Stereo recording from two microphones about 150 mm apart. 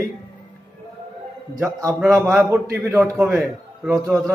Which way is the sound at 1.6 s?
20° right (ahead or behind).